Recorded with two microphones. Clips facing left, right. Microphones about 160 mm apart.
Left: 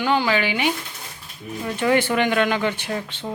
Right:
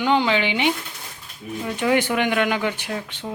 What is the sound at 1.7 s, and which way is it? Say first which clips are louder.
Speech: left 1 dB; 15° right (ahead or behind).